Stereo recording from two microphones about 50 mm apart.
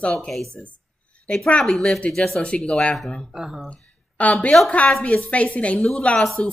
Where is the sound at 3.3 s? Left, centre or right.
Centre.